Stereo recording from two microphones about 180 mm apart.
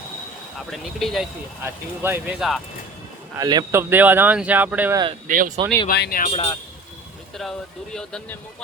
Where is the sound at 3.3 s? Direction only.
20° right (ahead or behind).